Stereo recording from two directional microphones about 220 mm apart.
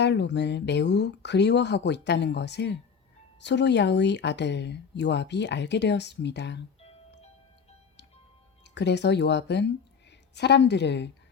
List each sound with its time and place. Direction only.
0.0 s speech: 50° left (ahead or behind)
8.6 s speech: 50° left (ahead or behind)